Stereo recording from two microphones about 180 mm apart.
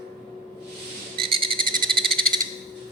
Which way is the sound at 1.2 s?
30° right (ahead or behind).